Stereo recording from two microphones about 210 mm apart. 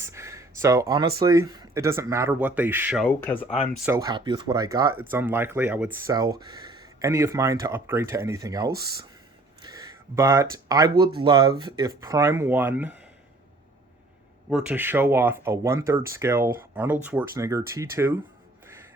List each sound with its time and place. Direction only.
0.0 s speech: 15° right (ahead or behind)
3.1 s speech: 10° left (ahead or behind)
3.5 s speech: 35° left (ahead or behind)
3.8 s speech: 15° right (ahead or behind)
14.5 s speech: 10° right (ahead or behind)